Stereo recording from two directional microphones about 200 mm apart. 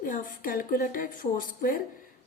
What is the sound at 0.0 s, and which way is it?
A woman's voice, 40° left (ahead or behind).